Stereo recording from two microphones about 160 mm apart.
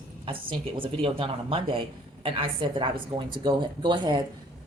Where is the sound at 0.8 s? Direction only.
35° right (ahead or behind).